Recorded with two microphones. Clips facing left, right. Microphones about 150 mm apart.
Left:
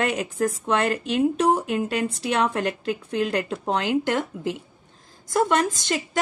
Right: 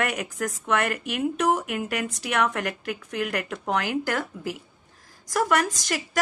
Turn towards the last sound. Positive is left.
turn(degrees=25)  # may be behind; listen again after turning